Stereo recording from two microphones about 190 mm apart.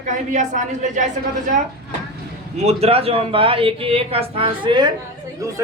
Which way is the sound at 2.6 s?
30° right (ahead or behind).